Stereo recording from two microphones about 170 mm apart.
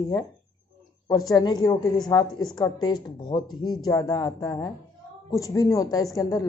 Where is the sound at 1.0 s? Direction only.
20° left (ahead or behind).